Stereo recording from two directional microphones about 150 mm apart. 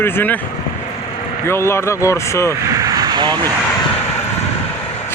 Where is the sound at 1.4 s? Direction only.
15° left (ahead or behind).